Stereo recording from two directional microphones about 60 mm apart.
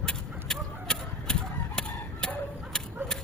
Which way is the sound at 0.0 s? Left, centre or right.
Centre.